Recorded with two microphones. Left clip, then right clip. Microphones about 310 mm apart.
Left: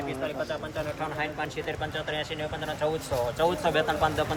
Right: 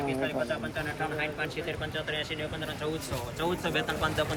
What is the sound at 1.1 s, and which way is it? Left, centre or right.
Speech, left.